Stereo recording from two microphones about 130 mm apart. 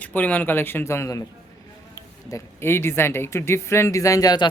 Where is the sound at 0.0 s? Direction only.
10° left (ahead or behind).